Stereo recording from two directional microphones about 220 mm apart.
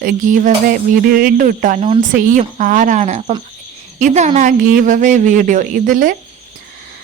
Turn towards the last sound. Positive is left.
turn(degrees=-40)  # may be behind; listen again after turning